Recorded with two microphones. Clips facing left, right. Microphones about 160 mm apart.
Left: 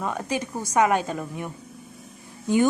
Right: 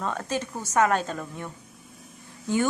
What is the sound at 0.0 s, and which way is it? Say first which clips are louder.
A woman's voice: left 2 dB; 10° left (ahead or behind).